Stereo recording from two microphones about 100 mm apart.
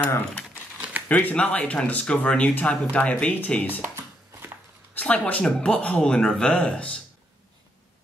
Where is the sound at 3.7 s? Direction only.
20° right (ahead or behind).